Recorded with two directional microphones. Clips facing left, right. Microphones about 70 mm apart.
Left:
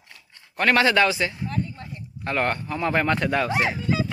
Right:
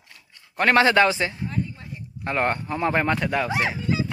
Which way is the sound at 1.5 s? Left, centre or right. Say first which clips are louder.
Even; centre.